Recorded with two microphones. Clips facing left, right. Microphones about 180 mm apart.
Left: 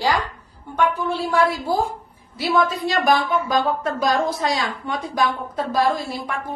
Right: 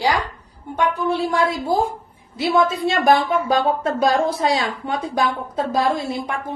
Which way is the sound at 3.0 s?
30° right (ahead or behind).